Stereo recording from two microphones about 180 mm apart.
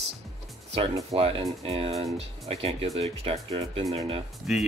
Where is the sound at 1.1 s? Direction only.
35° right (ahead or behind).